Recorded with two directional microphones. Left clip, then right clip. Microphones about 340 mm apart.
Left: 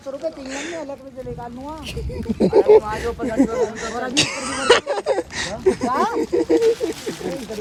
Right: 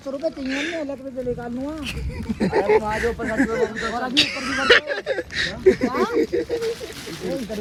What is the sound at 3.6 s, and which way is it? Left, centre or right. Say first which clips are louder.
Speech: even; centre.